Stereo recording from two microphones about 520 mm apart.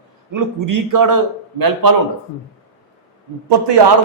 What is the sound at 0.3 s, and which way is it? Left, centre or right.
A man's voice, right.